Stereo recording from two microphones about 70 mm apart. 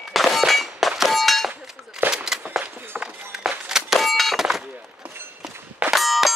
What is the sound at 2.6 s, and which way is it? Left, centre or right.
Run, right.